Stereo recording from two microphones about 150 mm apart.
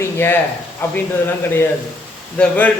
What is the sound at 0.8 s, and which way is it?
Speech, 15° left (ahead or behind).